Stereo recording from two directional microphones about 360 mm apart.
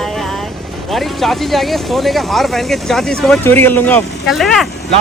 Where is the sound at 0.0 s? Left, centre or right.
Centre.